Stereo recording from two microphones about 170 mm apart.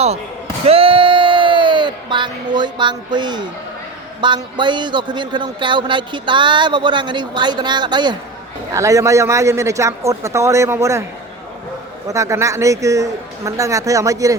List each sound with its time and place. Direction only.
0.6 s a sound: 35° right (ahead or behind)
4.2 s a man's voice: 25° right (ahead or behind)
12.0 s speech: 20° right (ahead or behind)